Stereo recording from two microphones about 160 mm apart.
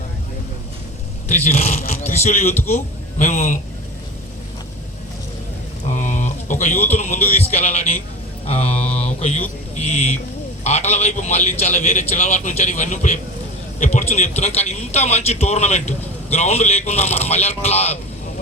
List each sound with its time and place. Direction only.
1.3 s a man's voice: 45° left (ahead or behind)
5.9 s a man's voice: 50° left (ahead or behind)